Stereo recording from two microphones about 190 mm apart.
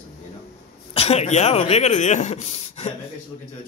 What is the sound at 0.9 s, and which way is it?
Speech, 35° left (ahead or behind).